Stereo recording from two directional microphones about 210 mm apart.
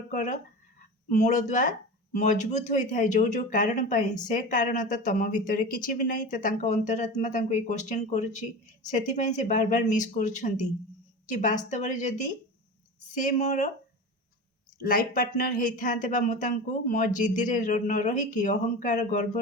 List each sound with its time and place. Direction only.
0.1 s speech: 35° left (ahead or behind)
14.8 s speech: 45° left (ahead or behind)